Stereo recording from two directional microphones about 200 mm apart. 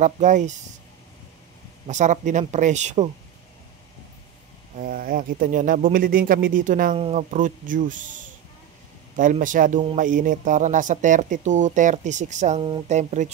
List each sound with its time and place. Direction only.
0.0 s speech: 35° right (ahead or behind)
1.9 s speech: 35° right (ahead or behind)
4.7 s speech: 45° right (ahead or behind)